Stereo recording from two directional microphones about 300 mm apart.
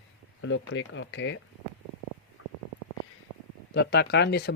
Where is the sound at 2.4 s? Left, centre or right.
Left.